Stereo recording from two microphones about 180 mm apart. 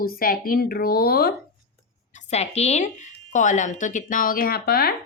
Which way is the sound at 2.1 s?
35° left (ahead or behind).